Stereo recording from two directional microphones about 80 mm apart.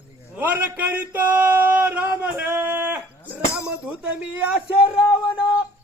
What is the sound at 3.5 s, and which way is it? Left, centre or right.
Speech, centre.